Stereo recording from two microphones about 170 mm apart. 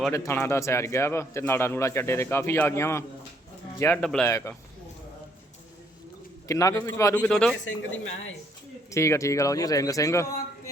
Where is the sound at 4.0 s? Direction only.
5° left (ahead or behind).